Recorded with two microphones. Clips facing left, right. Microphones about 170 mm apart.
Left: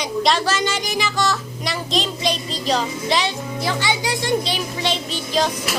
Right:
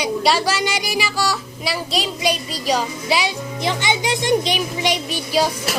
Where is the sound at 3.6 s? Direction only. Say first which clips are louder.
Right 2 dB; 20° right (ahead or behind).